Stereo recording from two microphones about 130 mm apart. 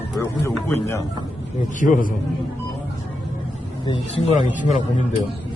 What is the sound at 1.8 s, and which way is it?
Speech, 90° left.